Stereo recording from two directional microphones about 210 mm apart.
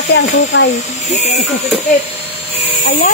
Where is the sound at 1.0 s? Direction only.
30° left (ahead or behind).